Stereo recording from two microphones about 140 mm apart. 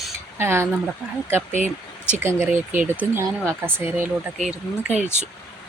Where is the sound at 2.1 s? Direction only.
15° right (ahead or behind).